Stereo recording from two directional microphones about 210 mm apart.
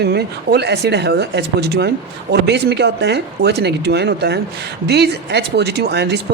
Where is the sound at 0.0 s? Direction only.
50° right (ahead or behind).